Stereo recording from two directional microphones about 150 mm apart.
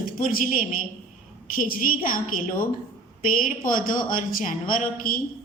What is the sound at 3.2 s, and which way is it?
A woman's voice, 65° left (ahead or behind).